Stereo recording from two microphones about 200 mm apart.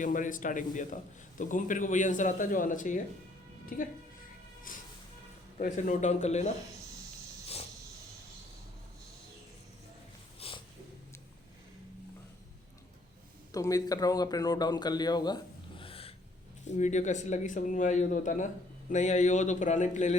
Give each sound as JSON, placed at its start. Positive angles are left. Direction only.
{"t": 0.0, "sound": "speech", "side_deg": 40}
{"t": 5.5, "sound": "speech", "side_deg": 40}
{"t": 10.4, "sound": "snort", "side_deg": 30}
{"t": 13.5, "sound": "speech", "side_deg": 15}